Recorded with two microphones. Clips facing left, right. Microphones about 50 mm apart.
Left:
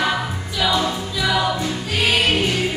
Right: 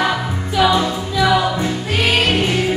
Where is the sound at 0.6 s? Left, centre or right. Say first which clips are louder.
Right 4 dB; right.